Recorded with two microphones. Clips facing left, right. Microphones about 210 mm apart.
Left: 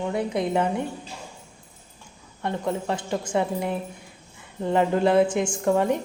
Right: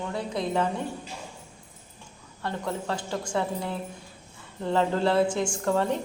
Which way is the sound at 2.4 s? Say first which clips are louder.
Left 4 dB; 20° left (ahead or behind).